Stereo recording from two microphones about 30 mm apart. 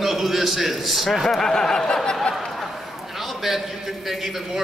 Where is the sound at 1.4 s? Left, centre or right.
Left.